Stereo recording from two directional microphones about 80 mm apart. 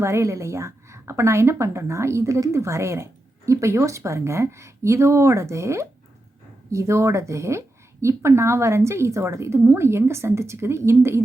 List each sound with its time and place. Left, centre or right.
0.0 s a woman's voice: right